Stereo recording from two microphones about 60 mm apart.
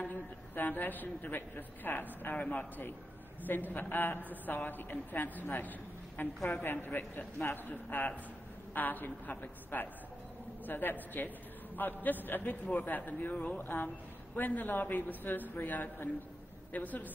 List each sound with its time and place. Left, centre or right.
0.6 s a woman's voice: left